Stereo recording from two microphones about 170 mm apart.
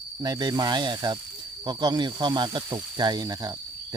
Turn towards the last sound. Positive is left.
turn(degrees=-20)  # may be behind; listen again after turning